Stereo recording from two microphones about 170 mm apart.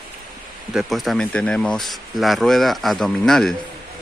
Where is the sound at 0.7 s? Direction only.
Centre (ahead or behind).